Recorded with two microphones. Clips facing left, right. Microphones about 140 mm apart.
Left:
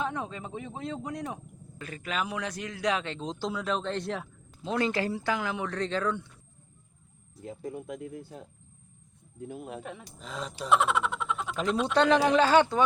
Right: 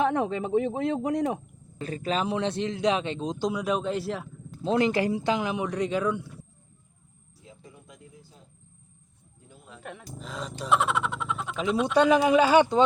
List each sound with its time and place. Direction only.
0.0 s speech: 60° right (ahead or behind)
1.8 s speech: 30° right (ahead or behind); by 4.3 s 5° right (ahead or behind)
4.6 s speech: 20° right (ahead or behind)
7.4 s speech: 55° left (ahead or behind)
9.8 s speech: centre (ahead or behind); by 12.8 s 15° right (ahead or behind)